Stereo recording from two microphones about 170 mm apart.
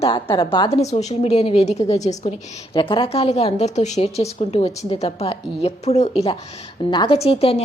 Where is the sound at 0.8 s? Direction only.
40° left (ahead or behind).